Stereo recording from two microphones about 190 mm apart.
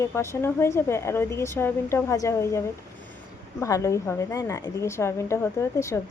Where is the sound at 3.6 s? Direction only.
15° left (ahead or behind).